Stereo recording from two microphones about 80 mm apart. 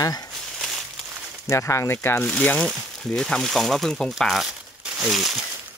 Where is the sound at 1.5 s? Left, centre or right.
Left.